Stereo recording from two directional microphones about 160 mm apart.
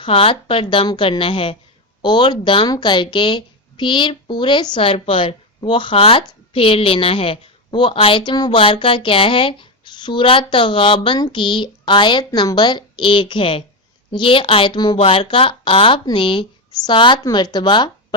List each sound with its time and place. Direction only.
0.0 s speech: 35° left (ahead or behind)